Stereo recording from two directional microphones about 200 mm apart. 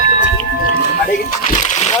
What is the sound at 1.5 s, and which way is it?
Splash, 35° left (ahead or behind).